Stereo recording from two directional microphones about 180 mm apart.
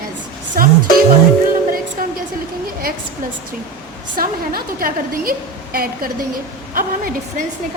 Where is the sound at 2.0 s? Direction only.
50° right (ahead or behind).